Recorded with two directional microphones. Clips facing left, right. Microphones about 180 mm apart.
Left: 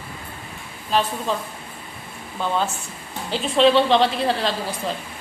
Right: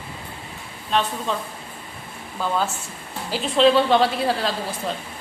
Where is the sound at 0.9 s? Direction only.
Centre (ahead or behind).